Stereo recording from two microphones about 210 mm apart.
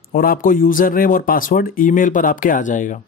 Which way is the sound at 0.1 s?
40° left (ahead or behind).